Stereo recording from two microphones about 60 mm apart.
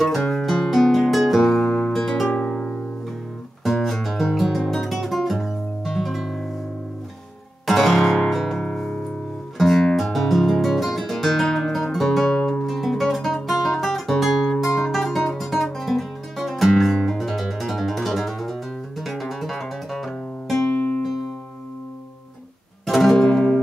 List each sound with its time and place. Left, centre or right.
0.3 s music: centre
1.5 s music: centre
2.2 s music: left
3.6 s music: centre
7.6 s music: centre
8.6 s music: centre
22.8 s music: centre